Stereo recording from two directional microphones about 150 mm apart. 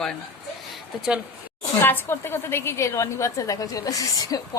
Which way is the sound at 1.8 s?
15° left (ahead or behind).